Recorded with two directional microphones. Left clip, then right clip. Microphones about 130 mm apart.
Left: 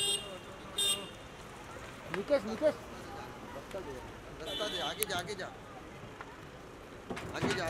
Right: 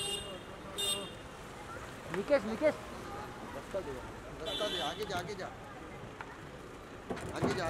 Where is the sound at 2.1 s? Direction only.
5° right (ahead or behind).